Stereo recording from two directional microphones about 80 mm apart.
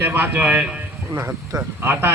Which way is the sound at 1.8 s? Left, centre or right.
Right.